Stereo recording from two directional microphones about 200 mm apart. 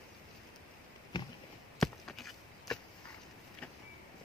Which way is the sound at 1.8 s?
Centre (ahead or behind).